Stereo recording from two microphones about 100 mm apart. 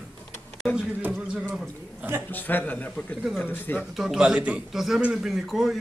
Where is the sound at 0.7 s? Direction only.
10° right (ahead or behind).